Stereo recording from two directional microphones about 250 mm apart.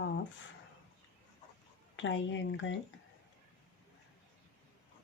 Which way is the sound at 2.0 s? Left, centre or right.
Left.